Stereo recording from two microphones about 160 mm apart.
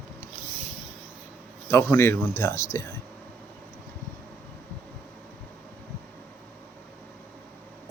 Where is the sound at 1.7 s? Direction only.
15° left (ahead or behind).